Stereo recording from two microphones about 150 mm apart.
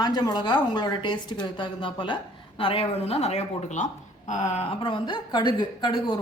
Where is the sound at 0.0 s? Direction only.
25° left (ahead or behind).